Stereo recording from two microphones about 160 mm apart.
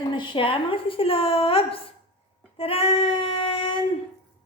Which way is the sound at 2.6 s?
35° left (ahead or behind).